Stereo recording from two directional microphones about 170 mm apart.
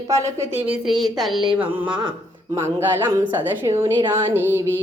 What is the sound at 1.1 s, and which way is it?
A woman's voice, centre (ahead or behind).